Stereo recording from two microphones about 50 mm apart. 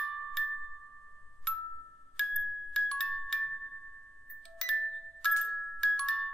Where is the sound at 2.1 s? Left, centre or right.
Centre.